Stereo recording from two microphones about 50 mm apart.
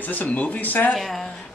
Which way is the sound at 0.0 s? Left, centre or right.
Left.